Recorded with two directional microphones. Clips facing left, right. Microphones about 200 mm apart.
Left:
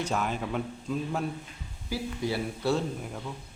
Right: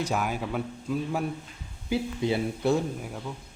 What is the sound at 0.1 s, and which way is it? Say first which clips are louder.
Speech: right 1 dB; 10° right (ahead or behind).